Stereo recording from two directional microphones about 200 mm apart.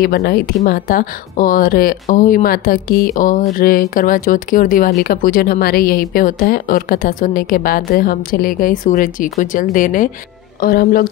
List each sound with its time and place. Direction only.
0.0 s speech: 50° left (ahead or behind)